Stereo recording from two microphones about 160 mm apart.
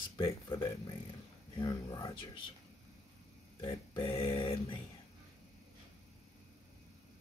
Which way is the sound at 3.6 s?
30° left (ahead or behind).